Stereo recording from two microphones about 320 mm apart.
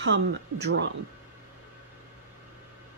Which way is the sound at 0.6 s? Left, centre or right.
Right.